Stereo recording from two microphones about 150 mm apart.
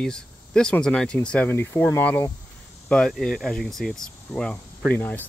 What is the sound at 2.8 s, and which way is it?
Speech, 5° left (ahead or behind).